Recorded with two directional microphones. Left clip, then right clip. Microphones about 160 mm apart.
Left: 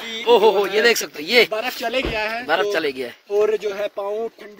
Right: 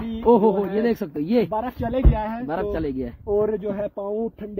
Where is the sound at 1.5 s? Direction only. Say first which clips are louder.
Left 3 dB; 25° right (ahead or behind).